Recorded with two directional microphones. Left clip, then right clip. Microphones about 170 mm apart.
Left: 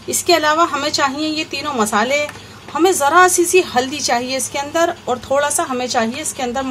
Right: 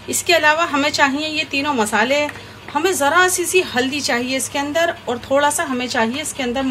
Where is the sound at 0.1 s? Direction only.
60° left (ahead or behind).